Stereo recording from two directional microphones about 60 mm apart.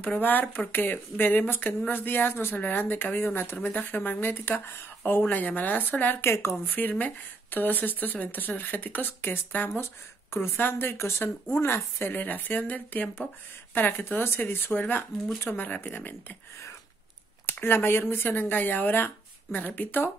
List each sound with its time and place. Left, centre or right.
0.0 s speech: left
6.3 s speech: left
6.7 s speech: left
10.7 s speech: left
17.5 s speech: left